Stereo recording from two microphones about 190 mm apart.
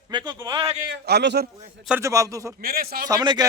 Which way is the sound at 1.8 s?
10° right (ahead or behind).